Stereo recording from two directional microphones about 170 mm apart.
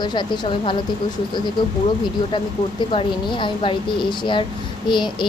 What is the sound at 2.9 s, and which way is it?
Speech, 30° left (ahead or behind).